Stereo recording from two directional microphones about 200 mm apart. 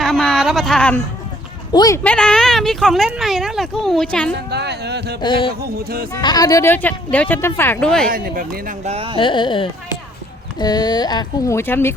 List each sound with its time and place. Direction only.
0.0 s a sound: centre (ahead or behind)
1.7 s speech: 20° left (ahead or behind)
2.0 s speech: 5° left (ahead or behind)
4.5 s speech: 55° right (ahead or behind)
5.2 s speech: 25° left (ahead or behind)
5.5 s speech: 50° right (ahead or behind)
6.1 s speech: 20° left (ahead or behind)
8.1 s speech: 45° right (ahead or behind); by 9.1 s 30° right (ahead or behind)
9.1 s speech: 25° left (ahead or behind)